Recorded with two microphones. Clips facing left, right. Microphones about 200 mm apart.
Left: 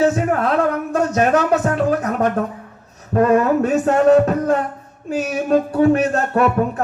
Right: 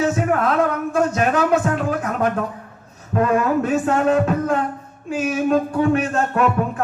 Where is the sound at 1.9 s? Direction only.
40° left (ahead or behind).